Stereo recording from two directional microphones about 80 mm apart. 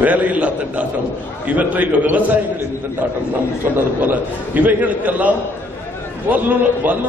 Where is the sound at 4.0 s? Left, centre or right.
Right.